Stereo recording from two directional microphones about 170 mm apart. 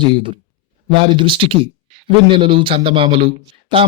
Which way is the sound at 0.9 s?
30° right (ahead or behind).